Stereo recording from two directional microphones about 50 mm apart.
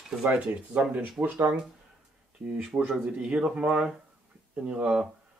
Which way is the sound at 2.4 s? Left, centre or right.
Right.